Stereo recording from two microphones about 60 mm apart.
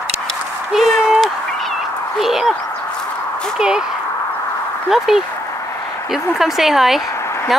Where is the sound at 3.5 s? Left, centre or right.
Centre.